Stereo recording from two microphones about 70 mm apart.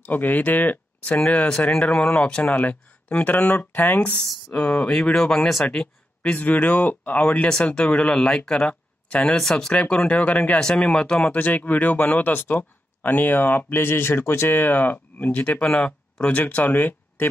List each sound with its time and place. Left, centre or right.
0.0 s speech: left
4.6 s speech: centre
6.3 s speech: left
9.4 s speech: centre
10.6 s speech: centre; by 17.3 s left